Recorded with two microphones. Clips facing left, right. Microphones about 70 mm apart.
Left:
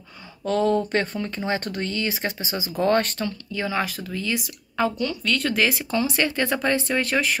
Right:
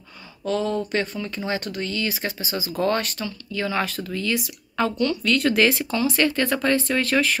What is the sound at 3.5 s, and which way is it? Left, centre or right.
Speech, left.